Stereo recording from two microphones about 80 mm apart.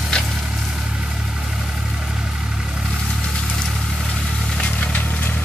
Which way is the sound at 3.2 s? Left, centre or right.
Centre.